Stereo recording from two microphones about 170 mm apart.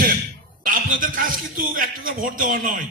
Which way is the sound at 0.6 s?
55° right (ahead or behind).